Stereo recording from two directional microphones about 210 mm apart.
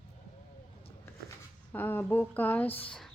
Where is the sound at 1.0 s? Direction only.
10° left (ahead or behind).